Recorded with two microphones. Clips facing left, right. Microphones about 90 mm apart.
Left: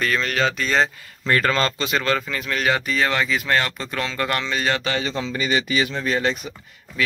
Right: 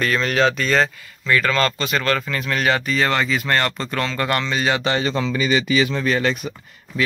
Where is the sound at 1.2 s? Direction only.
30° left (ahead or behind).